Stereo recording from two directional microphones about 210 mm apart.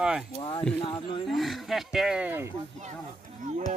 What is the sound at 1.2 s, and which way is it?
Speech, centre (ahead or behind).